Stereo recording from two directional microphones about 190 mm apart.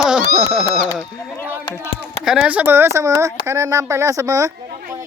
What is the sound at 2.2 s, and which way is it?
Speech, 5° right (ahead or behind).